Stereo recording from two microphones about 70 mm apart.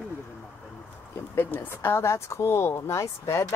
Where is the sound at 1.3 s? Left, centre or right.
Left.